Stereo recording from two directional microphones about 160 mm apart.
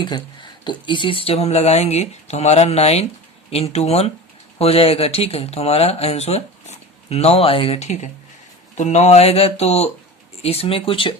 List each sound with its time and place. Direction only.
0.6 s speech: 30° left (ahead or behind)